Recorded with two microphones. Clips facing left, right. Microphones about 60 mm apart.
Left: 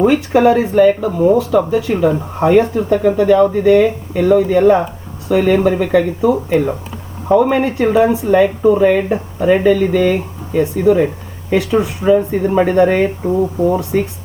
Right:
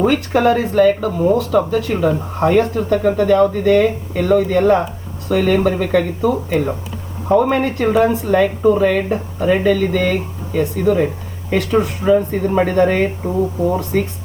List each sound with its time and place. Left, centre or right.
0.0 s speech: centre